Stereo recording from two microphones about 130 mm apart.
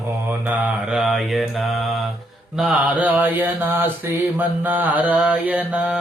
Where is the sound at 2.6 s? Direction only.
10° right (ahead or behind).